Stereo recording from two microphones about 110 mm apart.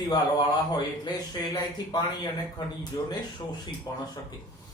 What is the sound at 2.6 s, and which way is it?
Speech, 40° left (ahead or behind).